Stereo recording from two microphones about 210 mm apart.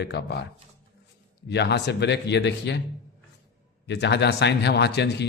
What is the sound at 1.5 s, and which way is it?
Speech, 55° left (ahead or behind).